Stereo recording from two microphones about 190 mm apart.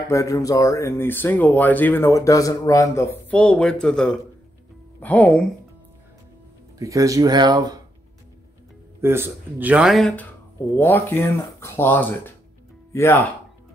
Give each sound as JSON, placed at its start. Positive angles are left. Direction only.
{"t": 0.1, "sound": "speech", "side_deg": 15}
{"t": 6.8, "sound": "speech", "side_deg": -15}
{"t": 9.0, "sound": "speech", "side_deg": -10}
{"t": 10.8, "sound": "speech", "side_deg": 10}